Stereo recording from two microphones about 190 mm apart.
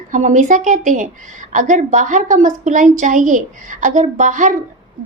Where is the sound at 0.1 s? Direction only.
40° right (ahead or behind).